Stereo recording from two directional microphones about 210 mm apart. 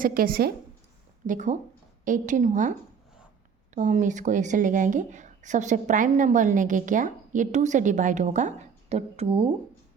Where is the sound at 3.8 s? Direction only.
35° right (ahead or behind).